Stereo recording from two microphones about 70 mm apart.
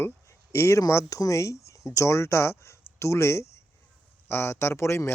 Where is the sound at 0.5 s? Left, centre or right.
Left.